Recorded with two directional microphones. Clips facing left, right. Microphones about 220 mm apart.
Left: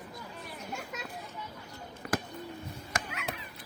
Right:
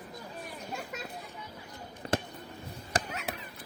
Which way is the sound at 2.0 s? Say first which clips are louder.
Right 1 dB; 30° right (ahead or behind).